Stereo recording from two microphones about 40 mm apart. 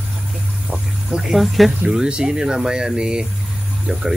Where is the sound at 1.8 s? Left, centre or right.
Centre.